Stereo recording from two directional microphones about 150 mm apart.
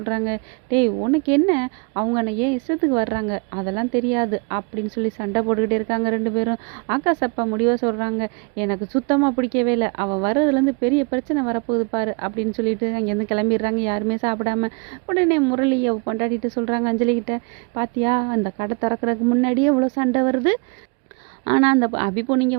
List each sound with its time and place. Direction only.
0.0 s speech: 30° right (ahead or behind)